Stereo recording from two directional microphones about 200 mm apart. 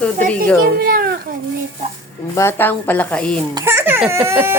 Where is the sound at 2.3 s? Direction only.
10° left (ahead or behind).